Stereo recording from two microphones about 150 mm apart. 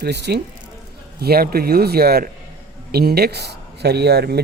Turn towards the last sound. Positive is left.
turn(degrees=-90)